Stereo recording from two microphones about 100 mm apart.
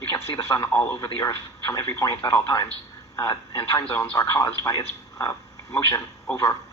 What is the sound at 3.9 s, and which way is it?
Speech, 20° left (ahead or behind).